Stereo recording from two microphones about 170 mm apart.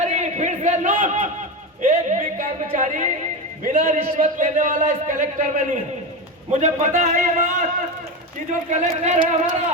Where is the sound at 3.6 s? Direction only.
50° right (ahead or behind).